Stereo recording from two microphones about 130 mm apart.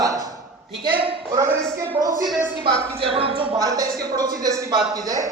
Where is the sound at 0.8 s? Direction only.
40° right (ahead or behind).